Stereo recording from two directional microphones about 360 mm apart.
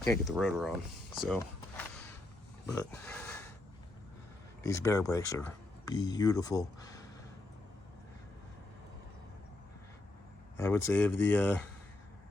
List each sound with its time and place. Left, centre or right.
0.0 s speech: centre
1.1 s a sound: centre
4.6 s speech: centre
10.6 s speech: centre